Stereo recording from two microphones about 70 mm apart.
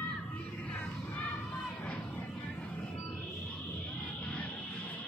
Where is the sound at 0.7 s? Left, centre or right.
Left.